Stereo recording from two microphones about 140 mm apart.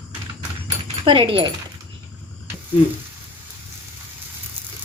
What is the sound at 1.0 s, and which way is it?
Speech, 40° right (ahead or behind).